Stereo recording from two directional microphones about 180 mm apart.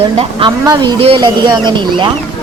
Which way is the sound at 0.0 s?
30° right (ahead or behind).